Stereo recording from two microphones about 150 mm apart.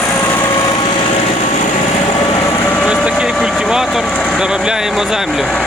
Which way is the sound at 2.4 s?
15° left (ahead or behind).